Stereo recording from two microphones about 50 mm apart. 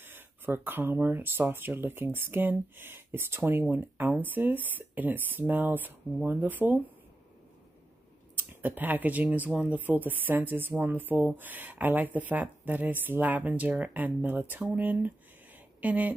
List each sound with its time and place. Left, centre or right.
0.0 s speech: right
8.4 s speech: right